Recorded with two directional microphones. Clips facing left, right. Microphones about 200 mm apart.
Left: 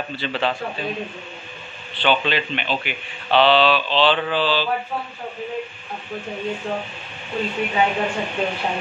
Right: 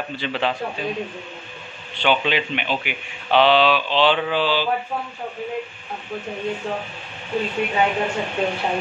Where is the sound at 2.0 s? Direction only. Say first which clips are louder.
Even; 15° right (ahead or behind).